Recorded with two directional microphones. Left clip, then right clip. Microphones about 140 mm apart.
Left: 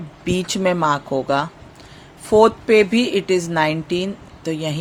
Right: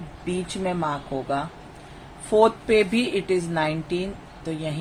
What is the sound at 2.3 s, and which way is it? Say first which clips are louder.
Speech: left 5 dB; 60° left (ahead or behind).